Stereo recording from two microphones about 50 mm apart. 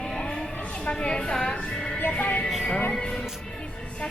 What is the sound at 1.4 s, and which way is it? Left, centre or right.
Music, centre.